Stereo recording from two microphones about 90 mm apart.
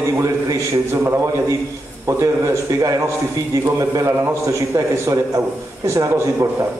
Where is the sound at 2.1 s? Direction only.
35° right (ahead or behind).